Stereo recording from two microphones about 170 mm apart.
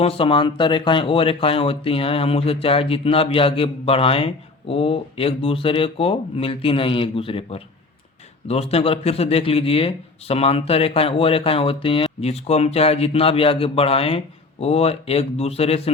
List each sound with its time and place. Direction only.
0.0 s a man's voice: 30° left (ahead or behind)